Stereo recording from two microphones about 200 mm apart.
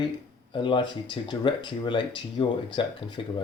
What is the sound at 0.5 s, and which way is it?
Speech, 25° left (ahead or behind).